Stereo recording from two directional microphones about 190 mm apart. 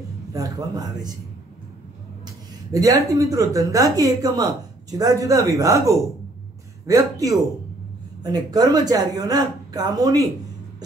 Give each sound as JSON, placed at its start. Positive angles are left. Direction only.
{"t": 0.3, "sound": "a man's voice", "side_deg": -20}
{"t": 2.7, "sound": "a woman's voice", "side_deg": -20}